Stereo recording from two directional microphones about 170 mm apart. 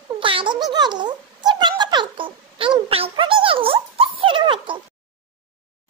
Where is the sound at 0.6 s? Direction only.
25° right (ahead or behind).